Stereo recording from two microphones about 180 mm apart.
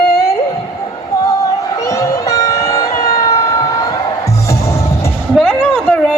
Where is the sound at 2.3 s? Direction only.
20° left (ahead or behind).